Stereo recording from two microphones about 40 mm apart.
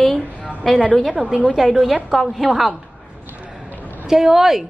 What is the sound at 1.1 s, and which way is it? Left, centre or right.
Speech, centre.